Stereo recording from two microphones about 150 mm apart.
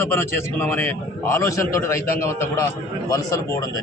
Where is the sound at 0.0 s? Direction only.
15° left (ahead or behind).